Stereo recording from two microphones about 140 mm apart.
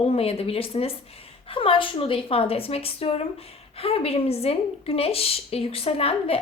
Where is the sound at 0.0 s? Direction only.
45° left (ahead or behind).